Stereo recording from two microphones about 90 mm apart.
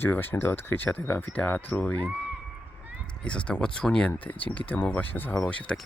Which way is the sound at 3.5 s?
10° left (ahead or behind).